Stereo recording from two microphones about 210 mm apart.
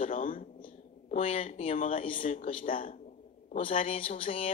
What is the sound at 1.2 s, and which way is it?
Speech, 25° left (ahead or behind).